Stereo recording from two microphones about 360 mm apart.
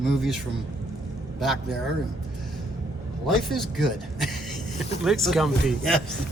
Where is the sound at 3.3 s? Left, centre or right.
Centre.